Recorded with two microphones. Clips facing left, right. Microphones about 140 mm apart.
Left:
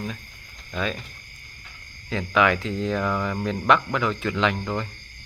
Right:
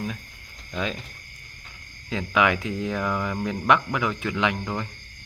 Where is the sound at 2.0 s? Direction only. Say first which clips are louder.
Left 1 dB; 15° right (ahead or behind).